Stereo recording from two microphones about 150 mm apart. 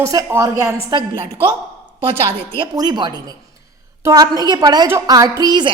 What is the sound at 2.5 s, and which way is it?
A man's voice, 30° right (ahead or behind).